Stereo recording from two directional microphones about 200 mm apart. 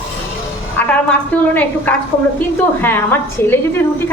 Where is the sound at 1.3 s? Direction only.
5° left (ahead or behind).